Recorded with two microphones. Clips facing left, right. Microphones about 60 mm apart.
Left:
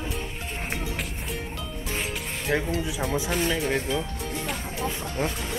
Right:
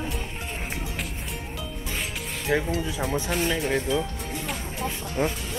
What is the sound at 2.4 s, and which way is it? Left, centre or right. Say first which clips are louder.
Speech: right 1 dB; centre.